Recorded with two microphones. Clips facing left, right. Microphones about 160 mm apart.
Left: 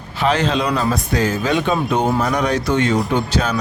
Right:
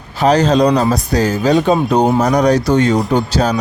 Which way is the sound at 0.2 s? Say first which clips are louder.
Right 7 dB; 40° right (ahead or behind).